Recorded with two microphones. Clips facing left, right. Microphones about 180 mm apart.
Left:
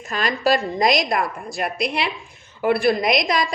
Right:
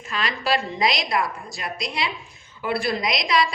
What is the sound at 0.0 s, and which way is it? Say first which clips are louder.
A woman's voice: left 6 dB; 45° left (ahead or behind).